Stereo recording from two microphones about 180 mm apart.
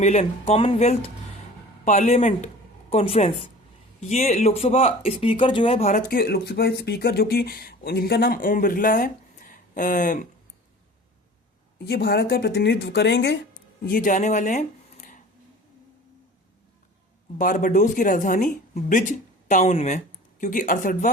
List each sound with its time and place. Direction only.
0.0 s speech: 40° left (ahead or behind)
11.9 s speech: 60° left (ahead or behind)
13.8 s speech: 50° left (ahead or behind)
17.3 s speech: 45° left (ahead or behind)